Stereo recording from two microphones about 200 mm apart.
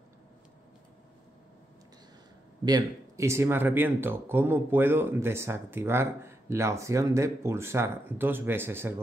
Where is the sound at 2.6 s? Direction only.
15° right (ahead or behind).